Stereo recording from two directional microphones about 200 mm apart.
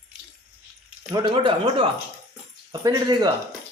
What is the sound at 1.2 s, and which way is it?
Speech, 25° right (ahead or behind).